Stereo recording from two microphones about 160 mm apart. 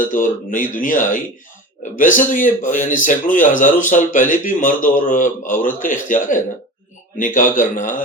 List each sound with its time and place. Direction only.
0.1 s a man's voice: 55° left (ahead or behind)